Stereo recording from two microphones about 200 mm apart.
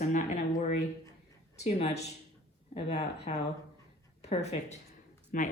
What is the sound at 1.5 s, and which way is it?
Speech, 35° left (ahead or behind).